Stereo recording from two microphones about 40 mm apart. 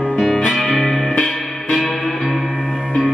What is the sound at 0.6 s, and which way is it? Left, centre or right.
Music, centre.